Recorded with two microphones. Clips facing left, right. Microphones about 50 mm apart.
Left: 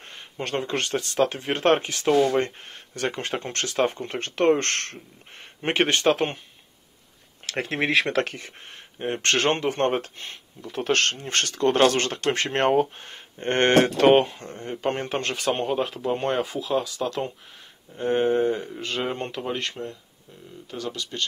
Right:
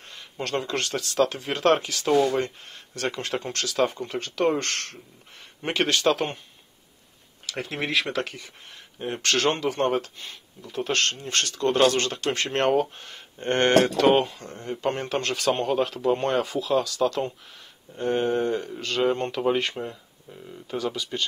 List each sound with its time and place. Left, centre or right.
0.4 s speech: left
2.3 s speech: left
5.6 s speech: left
7.4 s speech: left; by 19.4 s centre
19.4 s speech: centre